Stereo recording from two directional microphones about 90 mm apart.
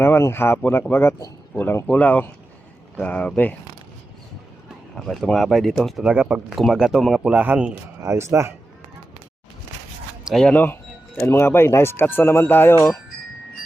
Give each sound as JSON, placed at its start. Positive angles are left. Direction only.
{"t": 0.0, "sound": "speech", "side_deg": 25}
{"t": 4.9, "sound": "speech", "side_deg": 5}
{"t": 6.0, "sound": "speech", "side_deg": -15}
{"t": 8.0, "sound": "speech", "side_deg": -30}
{"t": 10.5, "sound": "speech", "side_deg": 20}